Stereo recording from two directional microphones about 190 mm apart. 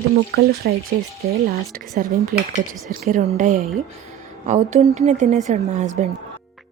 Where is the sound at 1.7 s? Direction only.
50° right (ahead or behind).